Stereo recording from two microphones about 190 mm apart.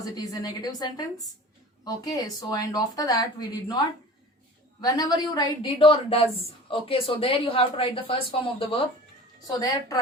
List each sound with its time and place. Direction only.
0.0 s speech: 20° left (ahead or behind)
4.8 s speech: 20° left (ahead or behind)